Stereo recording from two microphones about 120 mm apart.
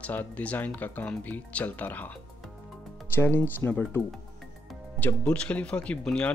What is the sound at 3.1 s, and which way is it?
Speech, 15° left (ahead or behind).